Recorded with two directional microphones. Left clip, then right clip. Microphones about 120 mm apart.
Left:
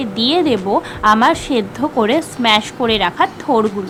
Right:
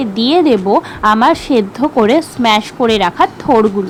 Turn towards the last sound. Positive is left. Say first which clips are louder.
# right 4 dB
turn(degrees=-55)  # may be behind; listen again after turning